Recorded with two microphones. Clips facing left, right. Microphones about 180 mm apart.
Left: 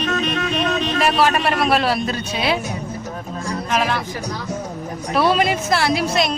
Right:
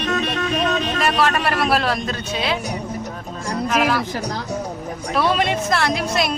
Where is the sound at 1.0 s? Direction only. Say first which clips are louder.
Left 3 dB; 5° left (ahead or behind).